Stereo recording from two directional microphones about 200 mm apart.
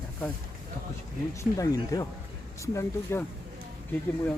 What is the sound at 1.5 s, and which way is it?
Speech, 15° left (ahead or behind).